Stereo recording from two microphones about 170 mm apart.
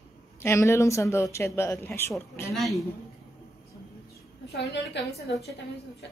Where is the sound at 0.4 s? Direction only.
15° left (ahead or behind).